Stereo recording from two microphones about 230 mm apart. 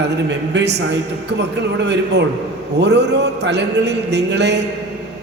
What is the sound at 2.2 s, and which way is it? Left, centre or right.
A man's voice, right.